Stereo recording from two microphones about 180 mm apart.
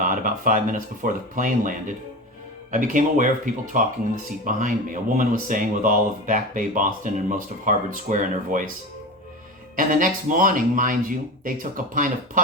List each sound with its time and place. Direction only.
0.0 s speech: 45° right (ahead or behind)
2.7 s speech: 45° right (ahead or behind)
9.7 s speech: 50° right (ahead or behind)